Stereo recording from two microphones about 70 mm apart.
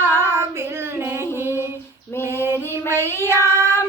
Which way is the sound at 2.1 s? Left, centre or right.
Left.